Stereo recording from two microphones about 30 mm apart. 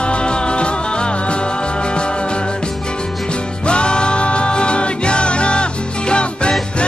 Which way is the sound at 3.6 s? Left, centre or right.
Left.